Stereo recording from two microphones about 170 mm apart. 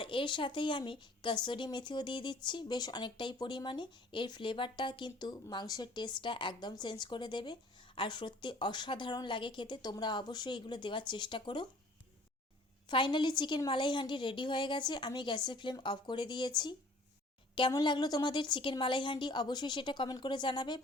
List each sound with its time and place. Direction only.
0.0 s speech: 30° left (ahead or behind)
12.9 s speech: 30° left (ahead or behind)